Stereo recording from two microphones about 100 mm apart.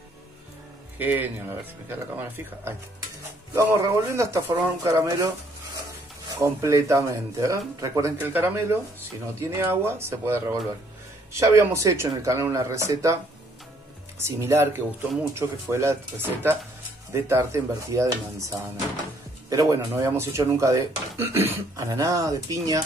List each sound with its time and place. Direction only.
0.9 s speech: 15° right (ahead or behind)
3.7 s speech: 30° right (ahead or behind)
6.4 s speech: 30° right (ahead or behind)
8.2 s speech: 20° right (ahead or behind)
14.2 s speech: 25° right (ahead or behind)